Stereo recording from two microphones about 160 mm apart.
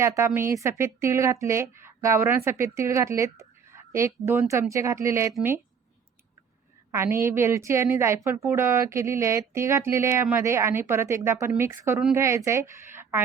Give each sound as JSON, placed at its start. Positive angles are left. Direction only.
{"t": 0.0, "sound": "a woman's voice", "side_deg": -15}
{"t": 6.9, "sound": "a woman's voice", "side_deg": -15}